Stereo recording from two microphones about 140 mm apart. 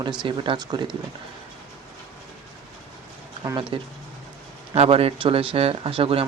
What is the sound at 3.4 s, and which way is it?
Speech, 35° right (ahead or behind).